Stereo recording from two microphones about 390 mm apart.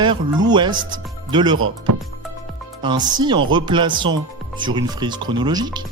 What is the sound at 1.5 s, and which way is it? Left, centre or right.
Speech, right.